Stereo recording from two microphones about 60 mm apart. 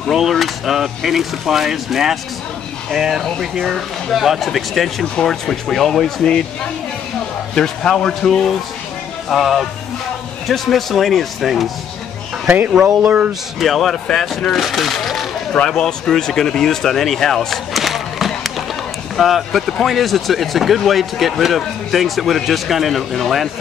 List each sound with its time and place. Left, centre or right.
0.1 s a man's voice: centre
12.4 s speech: right
13.6 s a man's voice: centre